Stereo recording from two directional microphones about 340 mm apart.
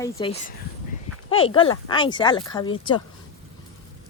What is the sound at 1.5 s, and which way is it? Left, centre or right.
Speech, centre.